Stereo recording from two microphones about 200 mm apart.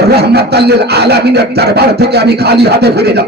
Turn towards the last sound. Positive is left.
turn(degrees=-55)  # may be behind; listen again after turning